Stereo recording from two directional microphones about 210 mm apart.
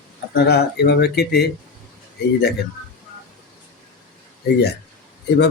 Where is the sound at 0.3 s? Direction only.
50° left (ahead or behind).